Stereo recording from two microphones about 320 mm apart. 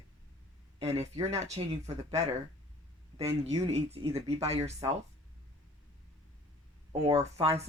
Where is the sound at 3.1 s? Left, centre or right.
Centre.